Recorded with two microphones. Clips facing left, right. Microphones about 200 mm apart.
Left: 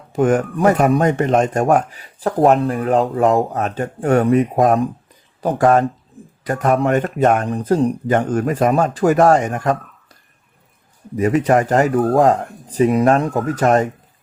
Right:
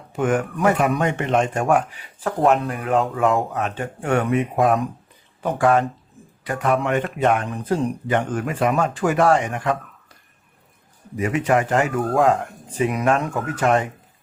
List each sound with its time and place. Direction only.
0.1 s speech: 40° left (ahead or behind)
11.2 s speech: 40° left (ahead or behind)